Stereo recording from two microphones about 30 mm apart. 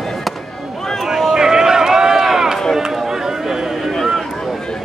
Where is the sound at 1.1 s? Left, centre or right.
Centre.